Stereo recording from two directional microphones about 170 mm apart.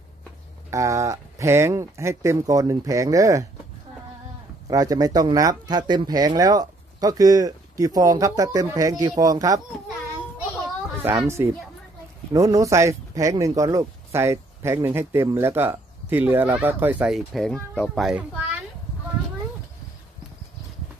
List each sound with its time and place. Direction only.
0.7 s speech: 15° right (ahead or behind)
4.6 s speech: 20° right (ahead or behind)
11.0 s speech: 15° right (ahead or behind)